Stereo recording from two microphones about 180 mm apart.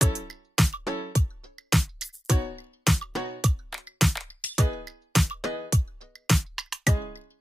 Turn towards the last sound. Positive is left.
turn(degrees=0)  # may be behind; listen again after turning